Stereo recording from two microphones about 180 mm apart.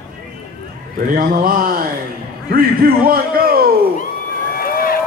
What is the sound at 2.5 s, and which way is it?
A man's voice, 55° right (ahead or behind).